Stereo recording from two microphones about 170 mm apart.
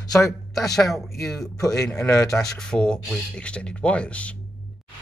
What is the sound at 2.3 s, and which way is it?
Speech, 5° left (ahead or behind).